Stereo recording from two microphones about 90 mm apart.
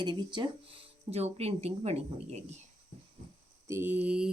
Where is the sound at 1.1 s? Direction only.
90° right.